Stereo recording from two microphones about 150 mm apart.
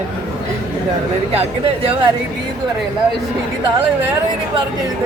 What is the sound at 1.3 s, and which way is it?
Speech, 40° right (ahead or behind).